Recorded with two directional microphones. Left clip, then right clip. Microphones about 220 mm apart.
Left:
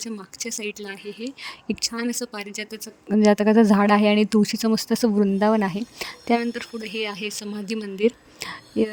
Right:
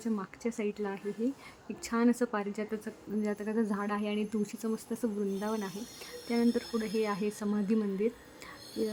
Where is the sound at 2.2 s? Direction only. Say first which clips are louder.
Left 1 dB; centre (ahead or behind).